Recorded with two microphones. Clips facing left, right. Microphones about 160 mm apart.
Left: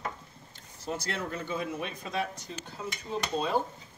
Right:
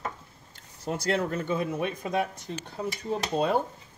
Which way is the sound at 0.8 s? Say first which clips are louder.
Right 7 dB; 55° right (ahead or behind).